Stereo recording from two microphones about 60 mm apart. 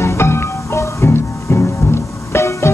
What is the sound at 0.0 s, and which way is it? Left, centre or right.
Music, left.